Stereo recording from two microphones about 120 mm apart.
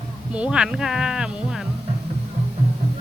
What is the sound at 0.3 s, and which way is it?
Speech, 5° right (ahead or behind).